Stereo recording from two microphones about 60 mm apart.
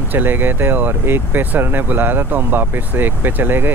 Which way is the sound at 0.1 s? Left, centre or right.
Right.